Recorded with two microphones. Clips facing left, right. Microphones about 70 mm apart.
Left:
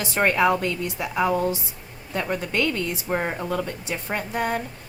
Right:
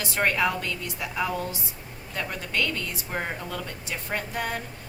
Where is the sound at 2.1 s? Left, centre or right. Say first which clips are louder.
Left 5 dB; left.